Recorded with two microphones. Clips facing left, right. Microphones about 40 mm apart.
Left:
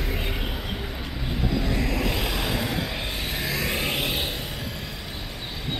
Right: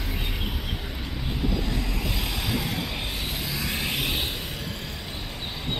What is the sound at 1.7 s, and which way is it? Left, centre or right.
Vehicle, left.